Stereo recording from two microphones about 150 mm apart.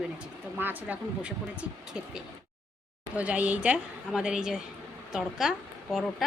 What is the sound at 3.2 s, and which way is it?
A woman's voice, 10° right (ahead or behind).